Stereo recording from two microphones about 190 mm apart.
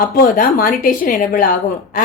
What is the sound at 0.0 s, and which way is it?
A woman's voice, 45° left (ahead or behind).